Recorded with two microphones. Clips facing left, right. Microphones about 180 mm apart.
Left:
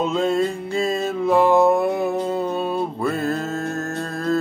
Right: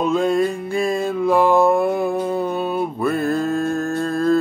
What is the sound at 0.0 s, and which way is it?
Music, 25° left (ahead or behind).